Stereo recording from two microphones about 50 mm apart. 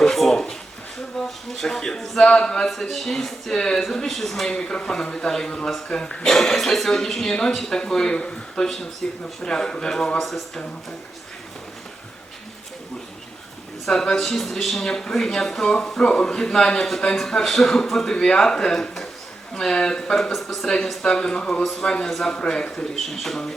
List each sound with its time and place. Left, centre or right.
0.0 s a sound: centre
1.2 s a man's voice: centre
4.4 s a man's voice: centre
14.2 s a man's voice: centre
20.1 s speech: centre
20.7 s a man's voice: centre
21.6 s a man's voice: centre
22.3 s a man's voice: centre
23.0 s speech: centre